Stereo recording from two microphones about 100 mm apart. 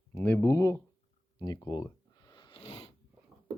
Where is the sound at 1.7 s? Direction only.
45° left (ahead or behind); by 2.9 s 90° left.